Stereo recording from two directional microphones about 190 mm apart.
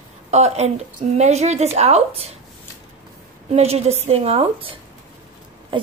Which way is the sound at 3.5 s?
35° right (ahead or behind).